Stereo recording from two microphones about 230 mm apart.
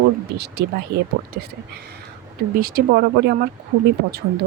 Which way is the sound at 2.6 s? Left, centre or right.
Right.